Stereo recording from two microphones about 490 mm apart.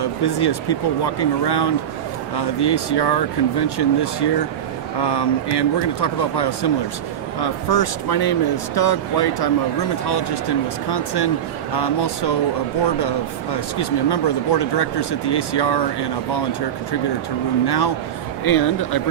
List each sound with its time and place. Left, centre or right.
0.0 s speech: left
13.7 s speech: left
17.7 s speech: left